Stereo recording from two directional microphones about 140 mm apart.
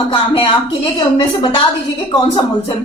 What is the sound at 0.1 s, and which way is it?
Speech, 35° left (ahead or behind).